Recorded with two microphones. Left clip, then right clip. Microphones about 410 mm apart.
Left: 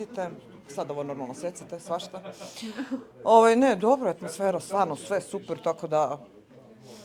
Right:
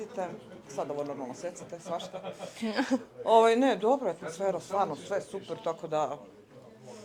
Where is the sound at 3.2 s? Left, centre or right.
Left.